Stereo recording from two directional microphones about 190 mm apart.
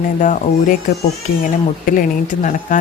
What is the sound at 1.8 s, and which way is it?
Speech, 45° left (ahead or behind).